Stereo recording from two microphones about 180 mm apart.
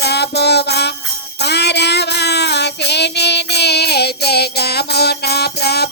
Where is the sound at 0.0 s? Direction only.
65° left (ahead or behind).